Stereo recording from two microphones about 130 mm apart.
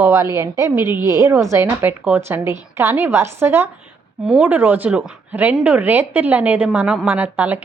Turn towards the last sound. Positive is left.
turn(degrees=-10)  # may be behind; listen again after turning